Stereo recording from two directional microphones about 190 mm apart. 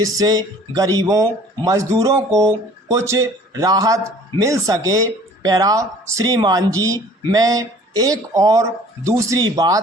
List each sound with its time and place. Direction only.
0.0 s speech: 20° right (ahead or behind)